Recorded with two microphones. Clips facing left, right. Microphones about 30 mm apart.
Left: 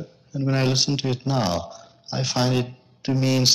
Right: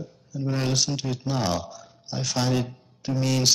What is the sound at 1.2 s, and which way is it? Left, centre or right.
Speech, centre.